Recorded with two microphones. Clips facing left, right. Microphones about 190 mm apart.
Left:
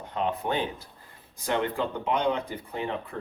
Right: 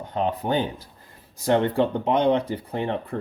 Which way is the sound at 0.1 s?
35° right (ahead or behind).